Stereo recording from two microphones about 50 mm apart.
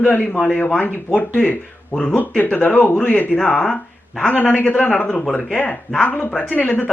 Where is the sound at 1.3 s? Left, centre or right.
Left.